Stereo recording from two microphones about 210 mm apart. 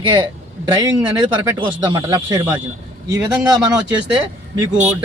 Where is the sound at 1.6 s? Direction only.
20° right (ahead or behind).